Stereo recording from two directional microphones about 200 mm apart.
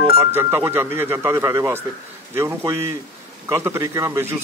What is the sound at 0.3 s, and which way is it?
Speech, 10° right (ahead or behind).